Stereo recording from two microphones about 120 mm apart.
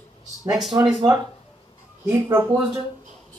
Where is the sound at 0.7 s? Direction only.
25° right (ahead or behind).